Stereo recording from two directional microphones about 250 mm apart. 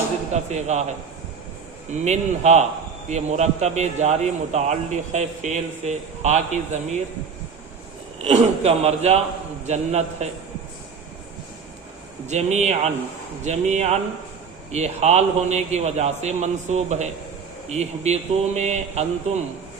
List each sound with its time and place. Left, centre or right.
0.3 s a man's voice: right
8.2 s a man's voice: right
12.3 s a man's voice: right